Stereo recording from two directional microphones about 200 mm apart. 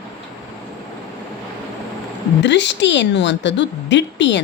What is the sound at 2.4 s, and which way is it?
A woman's voice, 60° left (ahead or behind).